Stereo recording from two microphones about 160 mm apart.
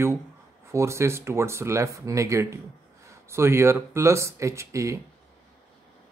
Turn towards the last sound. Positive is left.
turn(degrees=-20)  # may be behind; listen again after turning